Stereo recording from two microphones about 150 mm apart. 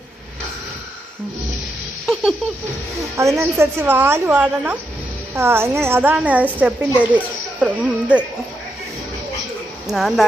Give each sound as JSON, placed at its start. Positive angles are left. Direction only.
{"t": 3.2, "sound": "a woman's voice", "side_deg": -20}
{"t": 9.8, "sound": "speech", "side_deg": -5}